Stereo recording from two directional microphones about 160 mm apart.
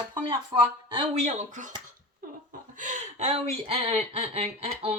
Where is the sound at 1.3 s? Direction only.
45° right (ahead or behind).